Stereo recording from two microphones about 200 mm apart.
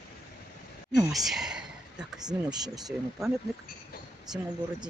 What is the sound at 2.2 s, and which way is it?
Speech, 20° right (ahead or behind).